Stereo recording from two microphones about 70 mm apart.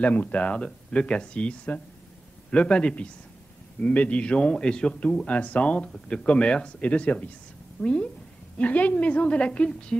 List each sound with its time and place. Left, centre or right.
0.0 s a man's voice: left